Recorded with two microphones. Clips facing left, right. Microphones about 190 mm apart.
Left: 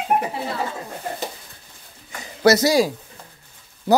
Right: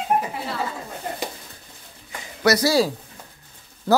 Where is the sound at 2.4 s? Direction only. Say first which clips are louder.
Left 3 dB; 20° left (ahead or behind).